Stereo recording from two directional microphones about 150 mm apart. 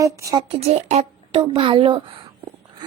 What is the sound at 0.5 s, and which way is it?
Speech, 45° right (ahead or behind).